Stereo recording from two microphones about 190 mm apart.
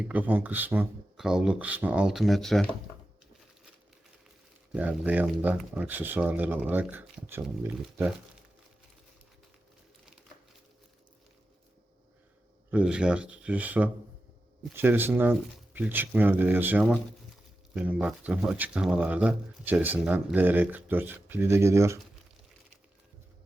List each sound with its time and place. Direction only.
0.0 s speech: 10° right (ahead or behind)
4.7 s speech: 5° right (ahead or behind)
12.7 s speech: 5° right (ahead or behind)